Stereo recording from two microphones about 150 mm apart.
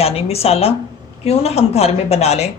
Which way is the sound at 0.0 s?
40° left (ahead or behind).